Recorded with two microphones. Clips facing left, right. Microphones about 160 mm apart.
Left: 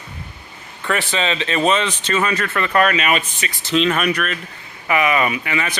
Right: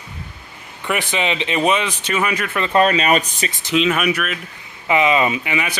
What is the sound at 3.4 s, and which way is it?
Speech, 20° right (ahead or behind).